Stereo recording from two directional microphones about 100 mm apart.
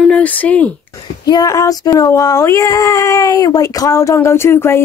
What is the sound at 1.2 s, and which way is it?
Speech, 40° left (ahead or behind).